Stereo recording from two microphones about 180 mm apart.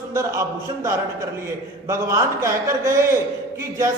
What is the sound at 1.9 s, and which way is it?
A man's voice, 15° right (ahead or behind).